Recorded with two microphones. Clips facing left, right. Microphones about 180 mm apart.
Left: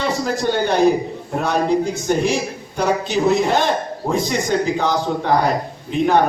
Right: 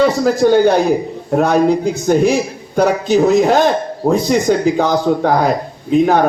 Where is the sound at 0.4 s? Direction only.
50° right (ahead or behind).